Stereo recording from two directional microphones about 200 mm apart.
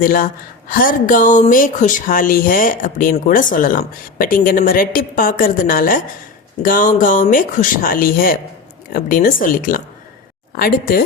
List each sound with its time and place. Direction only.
0.0 s speech: 45° left (ahead or behind)